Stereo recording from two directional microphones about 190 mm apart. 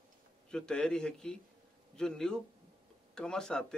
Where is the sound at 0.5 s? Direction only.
5° left (ahead or behind).